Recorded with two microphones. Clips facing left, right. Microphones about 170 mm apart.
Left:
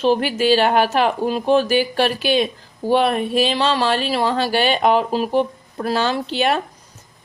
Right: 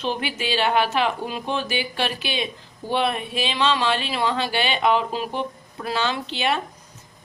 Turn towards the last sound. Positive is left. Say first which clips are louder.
# left 5 dB
turn(degrees=45)  # may be behind; listen again after turning